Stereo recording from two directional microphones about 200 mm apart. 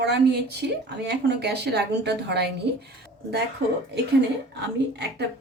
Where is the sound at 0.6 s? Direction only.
55° right (ahead or behind).